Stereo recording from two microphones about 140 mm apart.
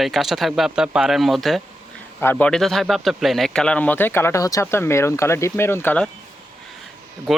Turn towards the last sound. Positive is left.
turn(degrees=0)  # may be behind; listen again after turning